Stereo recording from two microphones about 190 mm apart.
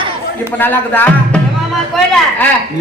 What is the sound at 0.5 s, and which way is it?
A man's voice, 10° left (ahead or behind).